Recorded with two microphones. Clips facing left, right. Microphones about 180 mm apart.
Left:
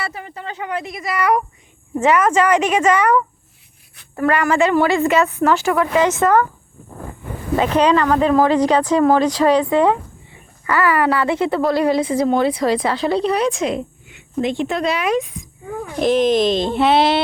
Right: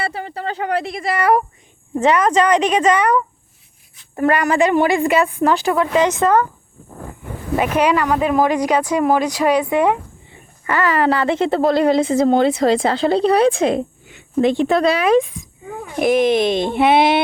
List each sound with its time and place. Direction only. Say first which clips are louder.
0.0 s speech: right 4 dB; 30° right (ahead or behind)
2.6 s a woman's voice: even; 25° right (ahead or behind)
7.5 s a woman's voice: left 1 dB; 10° right (ahead or behind); by 15.3 s 30° right (ahead or behind)
16.0 s speech: even; 10° right (ahead or behind)